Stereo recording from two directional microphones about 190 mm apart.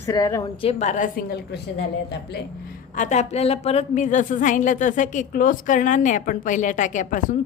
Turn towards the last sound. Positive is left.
turn(degrees=40)  # may be behind; listen again after turning